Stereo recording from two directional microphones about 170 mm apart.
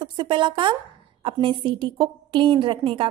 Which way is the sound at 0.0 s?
25° right (ahead or behind).